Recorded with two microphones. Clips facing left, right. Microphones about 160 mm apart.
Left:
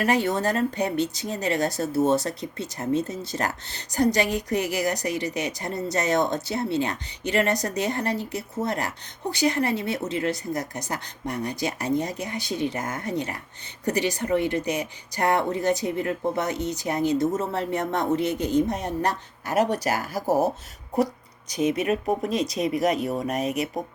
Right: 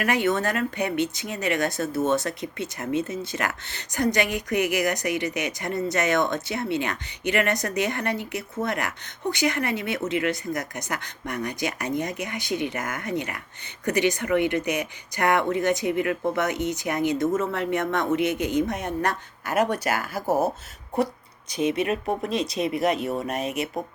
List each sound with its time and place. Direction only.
0.0 s speech: 35° left (ahead or behind)
21.7 s speech: 30° right (ahead or behind)
22.6 s speech: 40° left (ahead or behind)
23.0 s speech: 15° left (ahead or behind)
23.3 s speech: 35° left (ahead or behind)